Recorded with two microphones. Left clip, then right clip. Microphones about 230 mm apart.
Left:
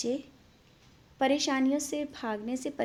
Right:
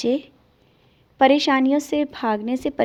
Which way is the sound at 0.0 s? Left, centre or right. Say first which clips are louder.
Right 11 dB; right.